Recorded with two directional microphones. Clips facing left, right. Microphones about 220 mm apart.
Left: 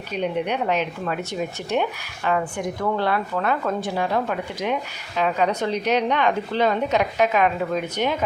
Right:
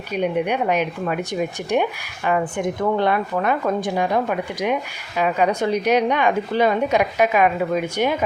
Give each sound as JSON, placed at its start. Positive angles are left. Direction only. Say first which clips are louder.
{"t": 0.1, "sound": "speech", "louder": "right 3 dB", "side_deg": -10}